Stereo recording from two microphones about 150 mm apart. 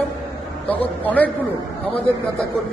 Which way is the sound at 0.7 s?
10° left (ahead or behind).